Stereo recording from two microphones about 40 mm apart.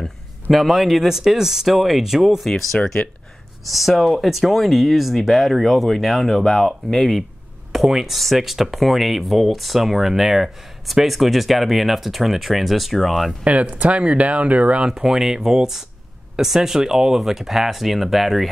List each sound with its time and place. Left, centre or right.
0.0 s speech: centre
2.4 s speech: centre
7.7 s speech: centre
13.4 s speech: right
14.9 s speech: centre